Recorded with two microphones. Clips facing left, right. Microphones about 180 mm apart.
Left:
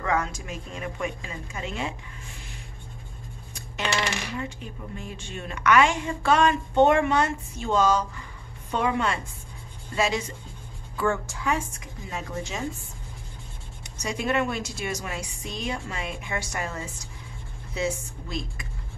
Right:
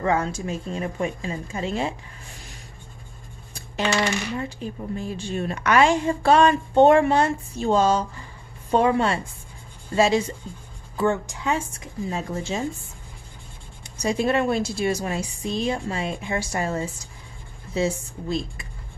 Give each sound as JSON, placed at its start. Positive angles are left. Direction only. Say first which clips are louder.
{"t": 0.0, "sound": "a woman's voice", "louder": "right 4 dB", "side_deg": -30}
{"t": 4.4, "sound": "a woman's voice", "louder": "right 4 dB", "side_deg": -35}
{"t": 13.9, "sound": "a woman's voice", "louder": "right 4 dB", "side_deg": -35}